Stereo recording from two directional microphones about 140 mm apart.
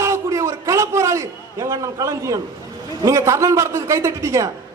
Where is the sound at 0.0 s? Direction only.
20° right (ahead or behind).